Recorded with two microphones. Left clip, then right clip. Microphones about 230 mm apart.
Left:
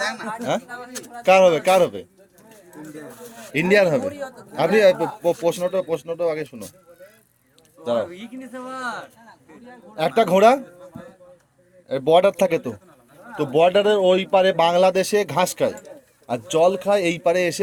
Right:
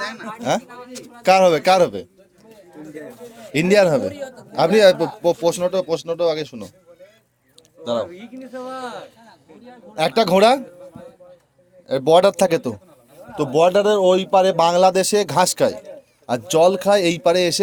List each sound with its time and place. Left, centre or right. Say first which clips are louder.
0.0 s a sound: left 3 dB; left
0.6 s a man's voice: left 2 dB; centre
1.2 s a man's voice: right 1 dB; right
3.5 s a man's voice: right 2 dB; right
8.1 s speech: right 2 dB; left
9.9 s a man's voice: right 1 dB; right
11.9 s a man's voice: right 2 dB; right